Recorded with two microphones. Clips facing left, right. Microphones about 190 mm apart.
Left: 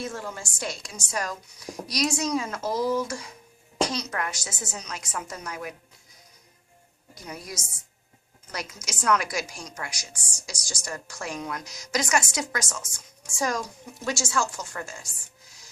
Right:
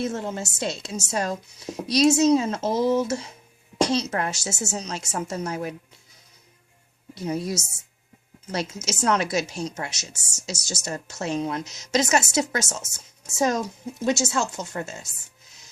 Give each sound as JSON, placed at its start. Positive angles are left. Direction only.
{"t": 0.0, "sound": "a woman's voice", "side_deg": -25}
{"t": 7.1, "sound": "a woman's voice", "side_deg": -25}